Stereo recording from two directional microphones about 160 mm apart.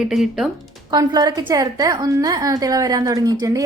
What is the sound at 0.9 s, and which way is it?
A woman's voice, 25° right (ahead or behind).